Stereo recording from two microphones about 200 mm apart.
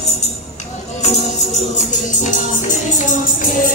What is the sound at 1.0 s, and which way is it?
Music, 35° left (ahead or behind).